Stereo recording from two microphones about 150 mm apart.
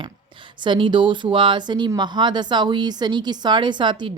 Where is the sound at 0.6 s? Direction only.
30° right (ahead or behind).